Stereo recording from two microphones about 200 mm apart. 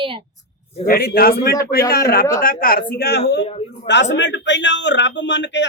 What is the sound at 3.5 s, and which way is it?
Speech, 30° left (ahead or behind).